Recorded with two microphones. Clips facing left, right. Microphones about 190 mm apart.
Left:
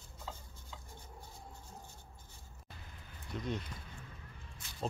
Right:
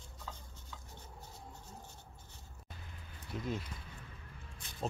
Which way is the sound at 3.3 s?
5° right (ahead or behind).